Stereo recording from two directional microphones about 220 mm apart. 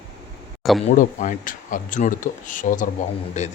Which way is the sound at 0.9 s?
35° left (ahead or behind).